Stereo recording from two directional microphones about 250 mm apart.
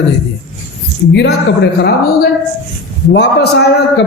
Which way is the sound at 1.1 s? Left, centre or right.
Left.